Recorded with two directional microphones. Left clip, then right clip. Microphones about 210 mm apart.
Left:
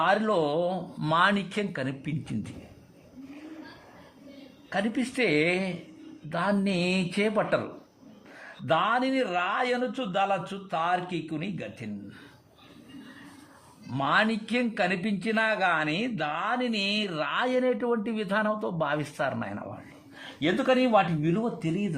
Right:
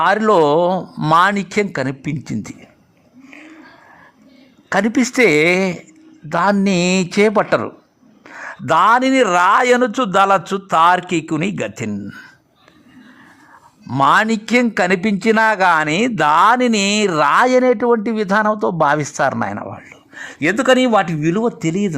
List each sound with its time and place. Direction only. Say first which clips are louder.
0.0 s speech: right 12 dB; 40° right (ahead or behind)
4.7 s speech: right 13 dB; 40° right (ahead or behind)
13.9 s speech: right 12 dB; 40° right (ahead or behind)